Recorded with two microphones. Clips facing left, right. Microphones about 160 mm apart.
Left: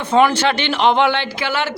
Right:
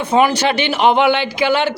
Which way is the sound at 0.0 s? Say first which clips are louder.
Even; 10° right (ahead or behind).